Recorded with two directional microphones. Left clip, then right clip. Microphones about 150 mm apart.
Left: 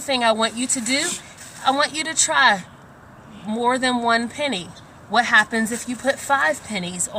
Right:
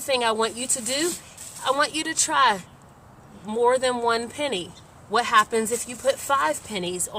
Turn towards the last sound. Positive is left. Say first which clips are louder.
# left 2 dB
turn(degrees=-55)  # may be behind; listen again after turning